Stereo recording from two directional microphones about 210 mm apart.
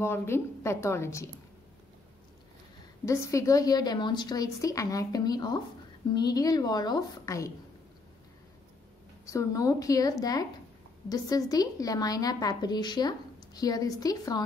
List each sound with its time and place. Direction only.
0.0 s a woman's voice: 10° left (ahead or behind)
3.1 s a woman's voice: 15° left (ahead or behind)
9.3 s a woman's voice: 15° left (ahead or behind)